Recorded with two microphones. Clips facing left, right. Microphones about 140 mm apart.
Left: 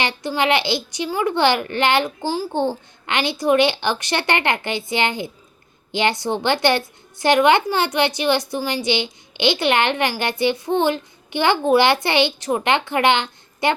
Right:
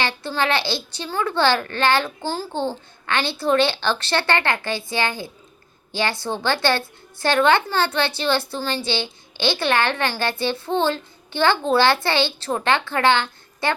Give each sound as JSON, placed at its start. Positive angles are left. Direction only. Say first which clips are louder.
{"t": 0.0, "sound": "a woman's voice", "louder": "left 2 dB", "side_deg": 15}